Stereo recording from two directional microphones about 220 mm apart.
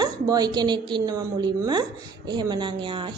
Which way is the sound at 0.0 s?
20° right (ahead or behind).